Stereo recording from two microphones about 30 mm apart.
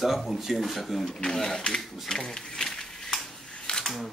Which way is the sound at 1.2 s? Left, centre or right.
Centre.